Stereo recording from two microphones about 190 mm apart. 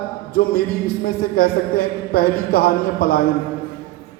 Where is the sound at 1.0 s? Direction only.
50° left (ahead or behind).